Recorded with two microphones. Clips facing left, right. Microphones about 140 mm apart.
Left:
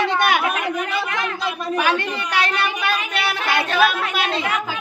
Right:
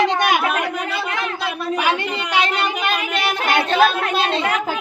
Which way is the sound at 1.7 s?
15° right (ahead or behind).